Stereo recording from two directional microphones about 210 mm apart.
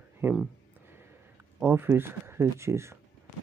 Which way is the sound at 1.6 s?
10° right (ahead or behind).